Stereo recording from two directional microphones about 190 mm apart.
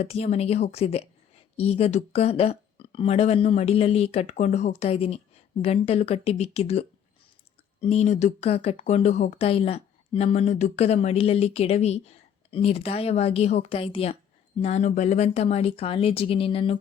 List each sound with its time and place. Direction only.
0.0 s speech: 35° left (ahead or behind)